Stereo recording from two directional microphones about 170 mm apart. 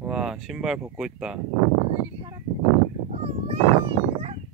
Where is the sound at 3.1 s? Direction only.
35° right (ahead or behind).